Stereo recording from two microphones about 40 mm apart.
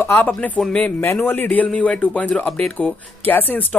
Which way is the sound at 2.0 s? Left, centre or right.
Left.